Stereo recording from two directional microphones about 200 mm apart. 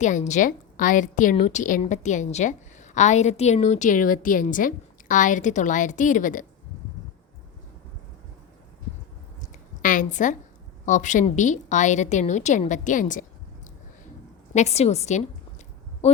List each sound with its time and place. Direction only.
0.0 s a woman's voice: 35° left (ahead or behind)
9.4 s a sound: 40° left (ahead or behind)
10.8 s a woman's voice: 40° left (ahead or behind)
14.5 s a woman's voice: 35° left (ahead or behind)